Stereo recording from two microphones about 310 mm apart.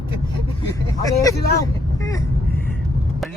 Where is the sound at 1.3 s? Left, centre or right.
Left.